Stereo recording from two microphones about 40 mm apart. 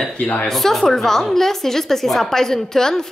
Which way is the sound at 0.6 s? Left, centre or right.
Centre.